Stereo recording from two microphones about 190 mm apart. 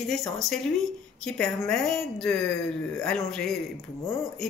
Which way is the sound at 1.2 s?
5° left (ahead or behind).